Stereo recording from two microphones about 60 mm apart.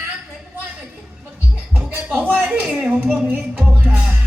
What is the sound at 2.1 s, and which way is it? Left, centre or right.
Speech, right.